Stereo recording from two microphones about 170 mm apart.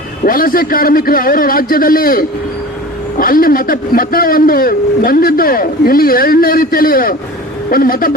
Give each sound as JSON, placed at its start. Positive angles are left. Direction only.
{"t": 0.3, "sound": "a man's voice", "side_deg": 55}